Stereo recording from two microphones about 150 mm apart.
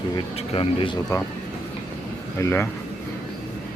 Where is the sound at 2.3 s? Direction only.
15° left (ahead or behind).